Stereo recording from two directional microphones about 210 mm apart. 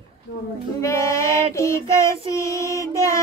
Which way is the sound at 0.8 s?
15° left (ahead or behind).